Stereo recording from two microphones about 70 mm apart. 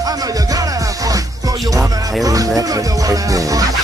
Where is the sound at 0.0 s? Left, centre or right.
Right.